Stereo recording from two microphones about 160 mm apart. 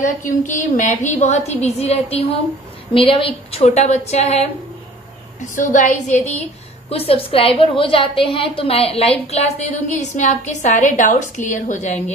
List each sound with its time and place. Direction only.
0.0 s a woman's voice: 50° left (ahead or behind)
5.6 s a woman's voice: 50° left (ahead or behind)